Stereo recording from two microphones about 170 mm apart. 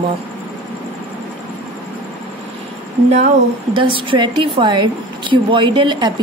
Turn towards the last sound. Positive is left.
turn(degrees=-25)  # may be behind; listen again after turning